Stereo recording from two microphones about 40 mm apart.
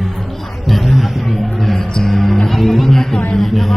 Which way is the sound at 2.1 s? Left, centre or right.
Centre.